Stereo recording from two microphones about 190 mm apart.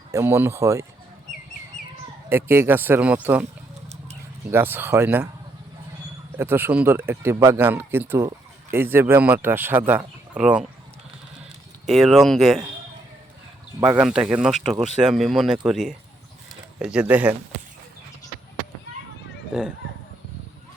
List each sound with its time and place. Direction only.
0.1 s speech: 15° right (ahead or behind)
2.3 s speech: 10° right (ahead or behind)
4.5 s speech: 10° right (ahead or behind)
6.3 s speech: 10° right (ahead or behind)
11.9 s speech: centre (ahead or behind)
13.7 s speech: 10° right (ahead or behind)
19.5 s speech: 5° right (ahead or behind)